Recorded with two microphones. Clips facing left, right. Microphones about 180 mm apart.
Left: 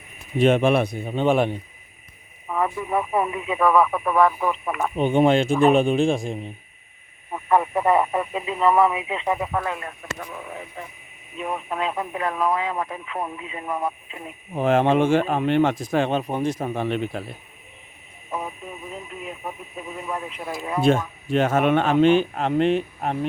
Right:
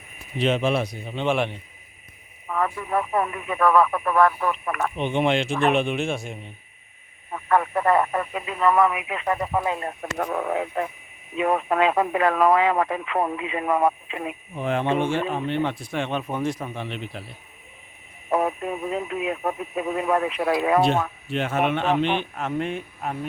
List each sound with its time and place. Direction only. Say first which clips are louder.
0.3 s speech: left 5 dB; 50° left (ahead or behind)
2.5 s speech: left 1 dB; 10° left (ahead or behind)
3.6 s speech: even; 5° left (ahead or behind)
4.9 s speech: left 6 dB; 40° left (ahead or behind)
7.3 s speech: left 1 dB; 15° left (ahead or behind)
9.2 s speech: even; 10° left (ahead or behind)
9.5 s speech: right 2 dB; 10° right (ahead or behind)
10.0 s speech: right 8 dB; 60° right (ahead or behind)
14.7 s speech: left 5 dB; 90° left
15.9 s speech: left 5 dB; 35° left (ahead or behind)
16.6 s speech: left 7 dB; 50° left (ahead or behind)
18.3 s speech: right 8 dB; 70° right (ahead or behind)
21.2 s speech: left 7 dB; 45° left (ahead or behind)